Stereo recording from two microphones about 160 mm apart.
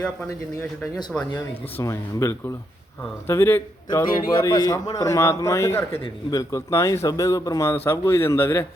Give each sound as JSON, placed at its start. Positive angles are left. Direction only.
{"t": 0.0, "sound": "speech", "side_deg": 10}
{"t": 1.8, "sound": "a man's voice", "side_deg": 20}
{"t": 3.8, "sound": "a man's voice", "side_deg": 25}